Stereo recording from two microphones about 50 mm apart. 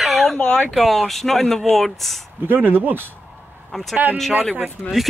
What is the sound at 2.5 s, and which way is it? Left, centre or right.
Speech, right.